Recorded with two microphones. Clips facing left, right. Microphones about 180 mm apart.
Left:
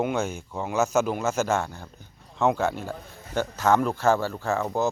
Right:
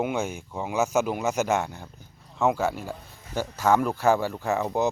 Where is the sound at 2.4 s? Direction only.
5° right (ahead or behind).